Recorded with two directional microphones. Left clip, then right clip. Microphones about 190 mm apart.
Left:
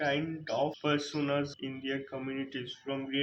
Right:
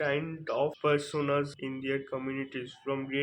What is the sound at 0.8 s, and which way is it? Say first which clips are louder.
Speech: right 3 dB; 25° right (ahead or behind).